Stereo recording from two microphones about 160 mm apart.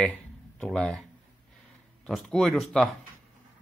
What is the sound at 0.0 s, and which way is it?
Speech, 5° left (ahead or behind).